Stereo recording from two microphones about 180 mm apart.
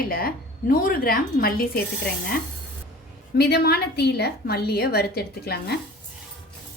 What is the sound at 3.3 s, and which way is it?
A woman's voice, 65° left (ahead or behind).